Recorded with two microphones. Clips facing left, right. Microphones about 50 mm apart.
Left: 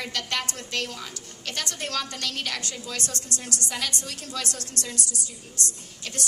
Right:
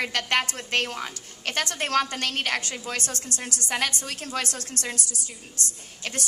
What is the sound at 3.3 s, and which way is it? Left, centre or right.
Speech, left.